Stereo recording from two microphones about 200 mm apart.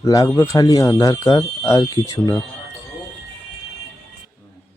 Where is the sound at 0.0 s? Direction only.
15° left (ahead or behind).